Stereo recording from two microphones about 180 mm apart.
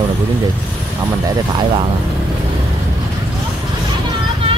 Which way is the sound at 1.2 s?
25° right (ahead or behind).